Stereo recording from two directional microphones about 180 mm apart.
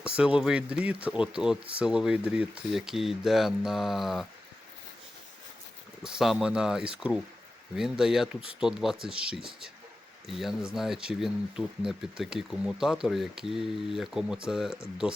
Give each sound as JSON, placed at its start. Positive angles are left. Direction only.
{"t": 0.0, "sound": "speech", "side_deg": -5}
{"t": 6.0, "sound": "speech", "side_deg": -5}